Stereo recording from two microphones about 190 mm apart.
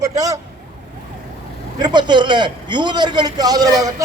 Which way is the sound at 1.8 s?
25° right (ahead or behind).